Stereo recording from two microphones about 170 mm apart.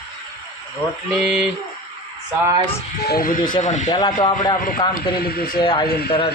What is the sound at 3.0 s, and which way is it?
Speech, 60° left (ahead or behind).